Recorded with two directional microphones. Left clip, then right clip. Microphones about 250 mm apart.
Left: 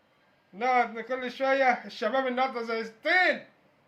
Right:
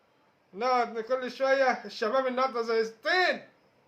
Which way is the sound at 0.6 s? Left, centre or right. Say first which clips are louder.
Left 1 dB; centre.